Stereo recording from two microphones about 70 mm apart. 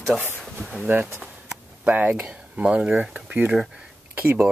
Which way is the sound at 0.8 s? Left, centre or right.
Right.